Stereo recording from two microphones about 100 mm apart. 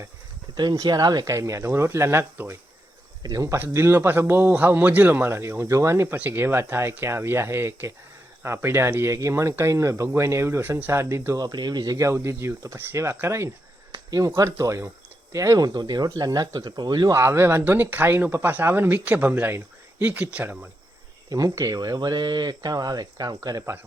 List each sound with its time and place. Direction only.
0.5 s speech: 45° right (ahead or behind)
1.2 s speech: 30° right (ahead or behind)
11.3 s speech: 45° right (ahead or behind)
12.0 s speech: 25° right (ahead or behind)
13.9 s speech: 40° right (ahead or behind)
17.2 s speech: 25° right (ahead or behind)
21.2 s speech: 35° right (ahead or behind)